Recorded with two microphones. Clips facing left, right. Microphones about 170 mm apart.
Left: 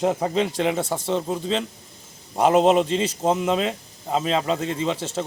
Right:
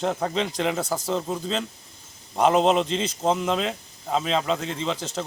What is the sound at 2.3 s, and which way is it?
A man's voice, 5° left (ahead or behind).